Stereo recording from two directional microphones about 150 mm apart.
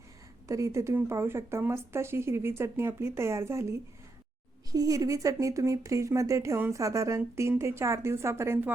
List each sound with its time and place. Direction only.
0.4 s speech: 20° right (ahead or behind)